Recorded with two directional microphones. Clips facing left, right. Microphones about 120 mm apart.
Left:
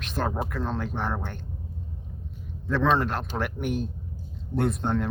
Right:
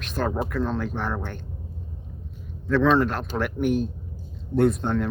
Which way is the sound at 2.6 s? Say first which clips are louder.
Right 4 dB; 15° left (ahead or behind).